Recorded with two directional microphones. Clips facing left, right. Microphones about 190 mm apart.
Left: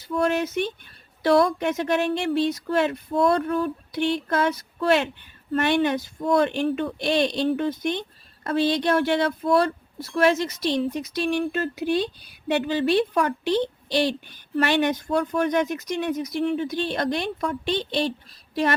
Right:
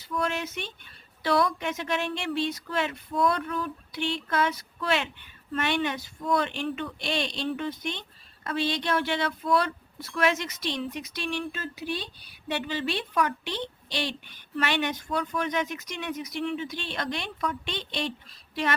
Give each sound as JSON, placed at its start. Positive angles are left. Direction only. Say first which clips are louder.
{"t": 0.1, "sound": "a woman's voice", "louder": "left 7 dB", "side_deg": 40}
{"t": 6.7, "sound": "a woman's voice", "louder": "left 7 dB", "side_deg": 35}
{"t": 12.7, "sound": "a woman's voice", "louder": "left 8 dB", "side_deg": 40}